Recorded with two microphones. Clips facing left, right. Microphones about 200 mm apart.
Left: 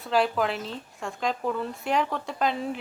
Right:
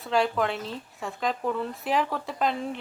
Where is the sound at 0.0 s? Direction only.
Centre (ahead or behind).